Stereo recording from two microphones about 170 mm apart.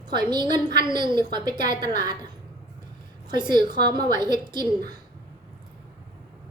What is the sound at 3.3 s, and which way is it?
A woman's voice, 25° right (ahead or behind).